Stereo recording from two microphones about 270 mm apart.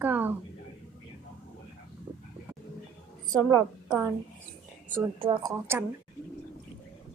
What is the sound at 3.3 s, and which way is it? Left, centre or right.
Speech, centre.